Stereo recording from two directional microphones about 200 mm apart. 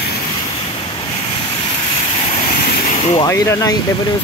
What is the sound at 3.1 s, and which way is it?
Speech, 15° left (ahead or behind).